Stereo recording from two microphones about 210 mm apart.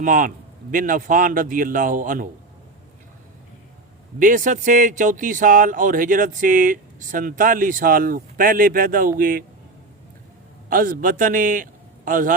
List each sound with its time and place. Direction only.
0.0 s speech: 40° right (ahead or behind)
4.2 s speech: 40° right (ahead or behind)
10.7 s a man's voice: 40° right (ahead or behind)